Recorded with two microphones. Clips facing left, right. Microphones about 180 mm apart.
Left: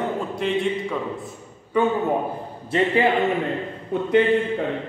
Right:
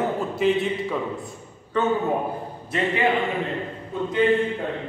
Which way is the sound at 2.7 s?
30° left (ahead or behind).